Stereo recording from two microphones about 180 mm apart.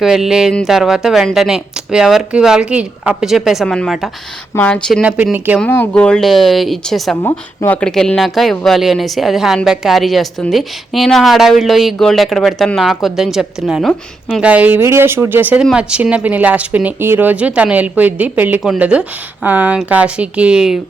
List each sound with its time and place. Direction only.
0.0 s a woman's voice: centre (ahead or behind)
5.0 s speech: 10° right (ahead or behind)
5.5 s a woman's voice: 10° left (ahead or behind)
7.2 s speech: 15° left (ahead or behind)
7.8 s a woman's voice: 5° left (ahead or behind)